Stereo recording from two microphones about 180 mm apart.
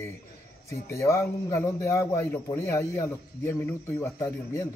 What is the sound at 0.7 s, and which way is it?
A man's voice, 15° left (ahead or behind).